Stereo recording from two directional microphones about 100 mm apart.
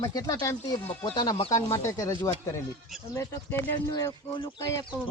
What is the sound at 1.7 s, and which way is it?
Speech, 30° left (ahead or behind).